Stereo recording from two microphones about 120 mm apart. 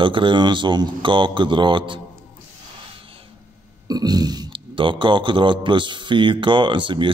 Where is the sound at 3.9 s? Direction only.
35° right (ahead or behind).